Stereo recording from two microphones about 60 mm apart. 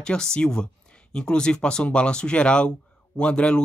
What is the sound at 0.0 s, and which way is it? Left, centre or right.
Speech, centre.